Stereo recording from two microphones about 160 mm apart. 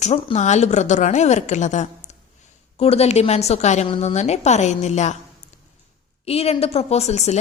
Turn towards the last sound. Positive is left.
turn(degrees=45)  # may be behind; listen again after turning